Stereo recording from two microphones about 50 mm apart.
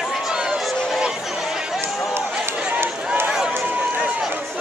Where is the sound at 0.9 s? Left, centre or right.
Centre.